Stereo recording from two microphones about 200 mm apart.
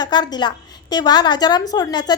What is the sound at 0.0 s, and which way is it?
A woman's voice, 20° left (ahead or behind).